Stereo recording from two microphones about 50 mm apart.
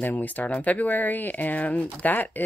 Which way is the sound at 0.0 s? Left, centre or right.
Left.